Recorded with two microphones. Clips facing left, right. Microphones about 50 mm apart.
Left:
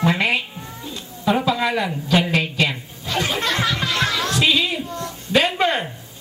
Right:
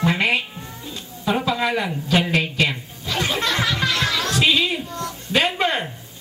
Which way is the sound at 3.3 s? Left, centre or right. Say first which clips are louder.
Even; left.